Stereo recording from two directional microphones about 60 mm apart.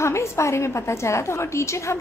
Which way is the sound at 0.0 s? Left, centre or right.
Left.